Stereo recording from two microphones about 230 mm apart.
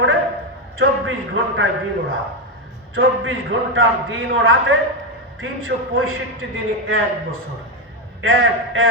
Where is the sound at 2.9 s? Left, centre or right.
Right.